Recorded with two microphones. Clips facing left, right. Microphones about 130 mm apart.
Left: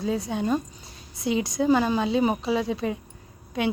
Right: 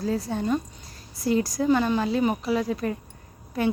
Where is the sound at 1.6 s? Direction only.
5° left (ahead or behind).